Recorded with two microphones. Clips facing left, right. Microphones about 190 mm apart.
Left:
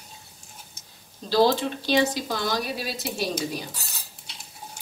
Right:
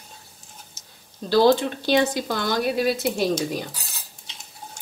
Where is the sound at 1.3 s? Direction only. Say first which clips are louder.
Right 3 dB; 55° right (ahead or behind).